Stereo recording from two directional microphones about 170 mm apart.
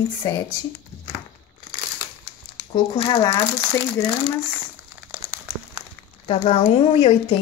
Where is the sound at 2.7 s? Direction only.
30° left (ahead or behind).